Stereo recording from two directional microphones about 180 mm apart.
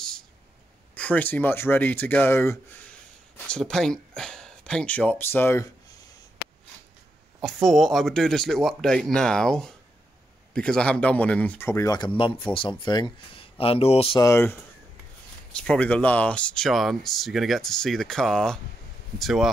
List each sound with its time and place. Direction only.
0.9 s speech: 10° left (ahead or behind)
7.4 s speech: centre (ahead or behind); by 14.2 s 30° left (ahead or behind)
14.2 s speech: 15° left (ahead or behind)